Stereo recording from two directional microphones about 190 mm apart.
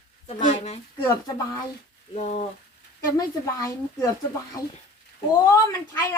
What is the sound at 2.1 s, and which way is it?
Speech, 35° left (ahead or behind).